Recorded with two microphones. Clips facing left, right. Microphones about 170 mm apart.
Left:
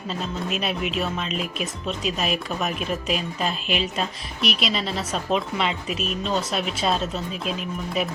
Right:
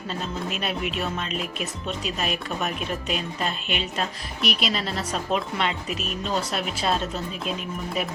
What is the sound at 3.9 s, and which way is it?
A woman's voice, centre (ahead or behind).